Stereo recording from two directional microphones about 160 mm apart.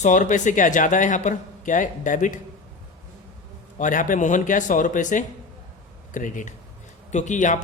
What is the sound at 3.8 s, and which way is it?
A man's voice, 55° left (ahead or behind).